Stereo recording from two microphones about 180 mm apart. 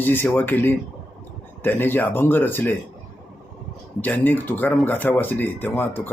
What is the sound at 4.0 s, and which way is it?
Speech, 10° left (ahead or behind).